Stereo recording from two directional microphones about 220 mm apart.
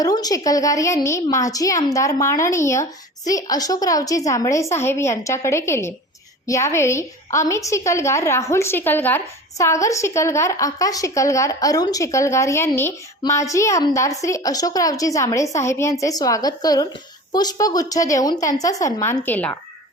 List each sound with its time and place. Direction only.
0.0 s a woman's voice: 15° left (ahead or behind)